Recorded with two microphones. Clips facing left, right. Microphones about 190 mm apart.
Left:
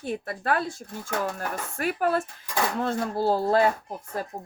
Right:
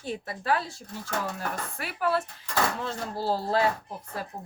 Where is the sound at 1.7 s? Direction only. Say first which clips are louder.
Left 4 dB; 45° left (ahead or behind).